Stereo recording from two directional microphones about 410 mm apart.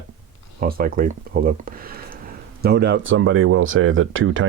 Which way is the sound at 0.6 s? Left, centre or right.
Right.